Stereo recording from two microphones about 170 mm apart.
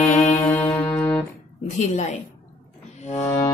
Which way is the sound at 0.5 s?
10° left (ahead or behind).